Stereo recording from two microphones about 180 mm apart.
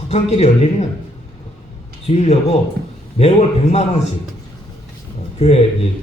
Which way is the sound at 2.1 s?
35° left (ahead or behind).